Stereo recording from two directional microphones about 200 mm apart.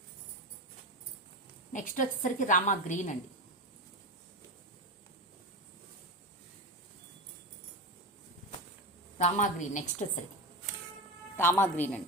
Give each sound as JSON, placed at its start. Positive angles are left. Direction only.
{"t": 1.7, "sound": "a woman's voice", "side_deg": 40}
{"t": 9.1, "sound": "a woman's voice", "side_deg": 35}
{"t": 11.3, "sound": "a woman's voice", "side_deg": 10}